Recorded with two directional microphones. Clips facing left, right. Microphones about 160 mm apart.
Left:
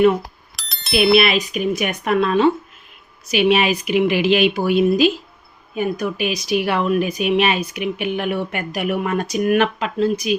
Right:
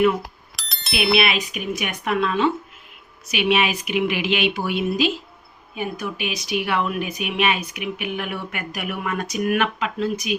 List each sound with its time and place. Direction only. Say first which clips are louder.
0.5 s bicycle bell: left 7 dB; centre (ahead or behind)
1.3 s speech: left 6 dB; 40° left (ahead or behind)